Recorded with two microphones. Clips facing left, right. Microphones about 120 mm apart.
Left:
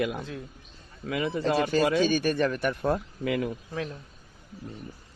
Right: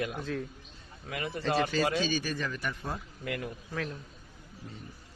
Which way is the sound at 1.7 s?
55° left (ahead or behind).